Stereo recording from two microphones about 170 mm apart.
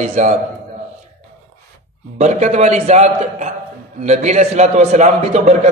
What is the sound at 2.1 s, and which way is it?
A man's voice, 45° right (ahead or behind).